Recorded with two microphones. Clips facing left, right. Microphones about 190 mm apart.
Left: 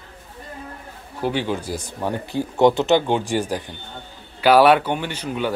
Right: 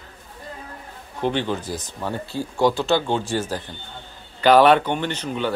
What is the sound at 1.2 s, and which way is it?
Speech, 10° left (ahead or behind).